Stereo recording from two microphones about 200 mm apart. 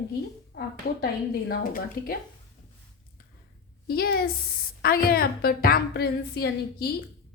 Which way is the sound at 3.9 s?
50° left (ahead or behind).